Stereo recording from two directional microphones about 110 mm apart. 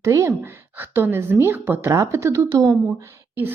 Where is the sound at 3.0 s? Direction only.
20° right (ahead or behind).